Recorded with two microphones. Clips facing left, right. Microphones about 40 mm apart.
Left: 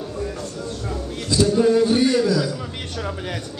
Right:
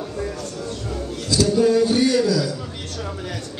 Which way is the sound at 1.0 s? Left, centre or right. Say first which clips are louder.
Left 1 dB; left.